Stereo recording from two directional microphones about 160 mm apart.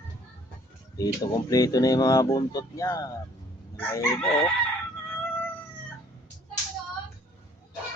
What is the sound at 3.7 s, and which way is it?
Crowing, 15° left (ahead or behind).